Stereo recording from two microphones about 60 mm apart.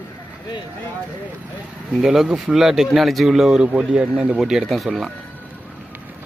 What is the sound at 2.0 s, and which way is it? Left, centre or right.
Speech, centre.